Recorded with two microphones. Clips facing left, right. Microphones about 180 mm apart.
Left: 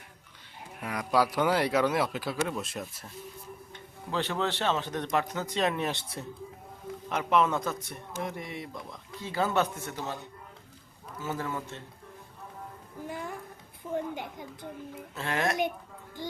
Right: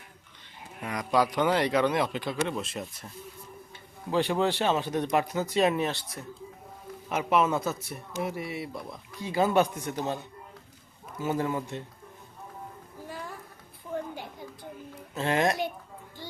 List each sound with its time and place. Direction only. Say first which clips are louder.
0.8 s speech: right 1 dB; 5° left (ahead or behind)
4.1 s a man's voice: right 5 dB; 10° right (ahead or behind)
5.9 s speech: even; 25° left (ahead or behind)
7.1 s a man's voice: right 1 dB; 5° right (ahead or behind)
11.2 s a man's voice: right 5 dB; 20° right (ahead or behind)
13.1 s a sound: left 3 dB; 15° left (ahead or behind)
15.1 s speech: right 5 dB; 20° right (ahead or behind)